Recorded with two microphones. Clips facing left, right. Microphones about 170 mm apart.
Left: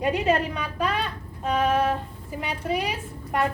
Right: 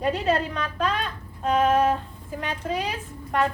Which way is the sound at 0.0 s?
15° left (ahead or behind).